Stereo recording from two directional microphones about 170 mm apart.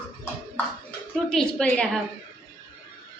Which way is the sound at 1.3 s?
5° left (ahead or behind).